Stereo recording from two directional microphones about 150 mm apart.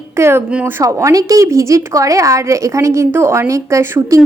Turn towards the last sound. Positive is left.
turn(degrees=-20)  # may be behind; listen again after turning